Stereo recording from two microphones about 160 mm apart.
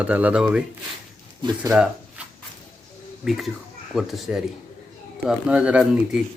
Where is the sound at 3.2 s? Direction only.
Centre (ahead or behind).